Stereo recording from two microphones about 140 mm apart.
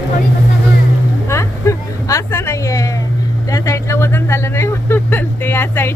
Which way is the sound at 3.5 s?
25° left (ahead or behind).